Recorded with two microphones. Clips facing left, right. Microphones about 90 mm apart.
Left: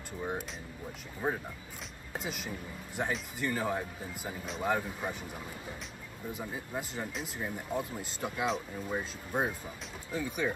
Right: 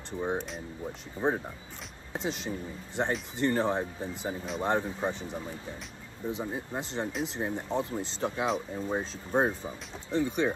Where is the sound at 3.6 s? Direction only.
25° right (ahead or behind).